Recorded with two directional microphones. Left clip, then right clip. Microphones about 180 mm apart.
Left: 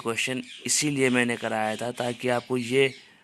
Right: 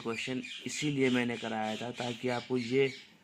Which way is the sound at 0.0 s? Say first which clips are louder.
Left 8 dB; 30° left (ahead or behind).